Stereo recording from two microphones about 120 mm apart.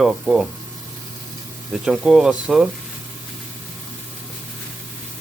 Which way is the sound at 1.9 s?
Centre (ahead or behind).